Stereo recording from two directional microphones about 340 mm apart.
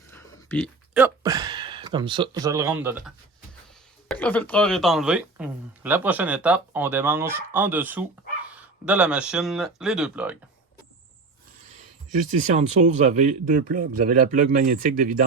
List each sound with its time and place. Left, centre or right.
0.1 s speech: centre
4.1 s speech: centre
12.1 s speech: right